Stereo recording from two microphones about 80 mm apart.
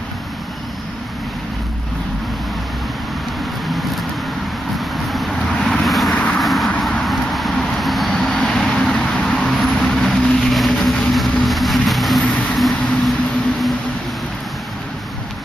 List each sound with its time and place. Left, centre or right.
5.0 s vehicle: centre
12.2 s vehicle: centre
12.5 s a sound: centre